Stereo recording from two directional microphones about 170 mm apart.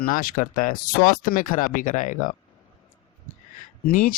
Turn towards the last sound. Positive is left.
turn(degrees=55)  # may be behind; listen again after turning